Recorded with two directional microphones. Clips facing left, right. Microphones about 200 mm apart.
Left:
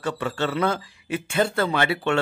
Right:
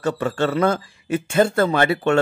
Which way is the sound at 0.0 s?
45° right (ahead or behind).